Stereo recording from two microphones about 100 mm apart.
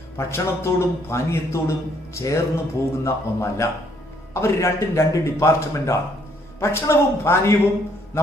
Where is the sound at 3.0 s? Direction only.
30° left (ahead or behind).